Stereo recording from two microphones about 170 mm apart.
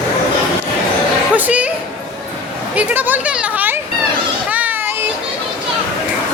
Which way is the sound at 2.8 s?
10° right (ahead or behind).